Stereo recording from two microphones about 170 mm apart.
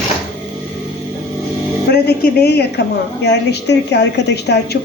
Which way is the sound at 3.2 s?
80° left.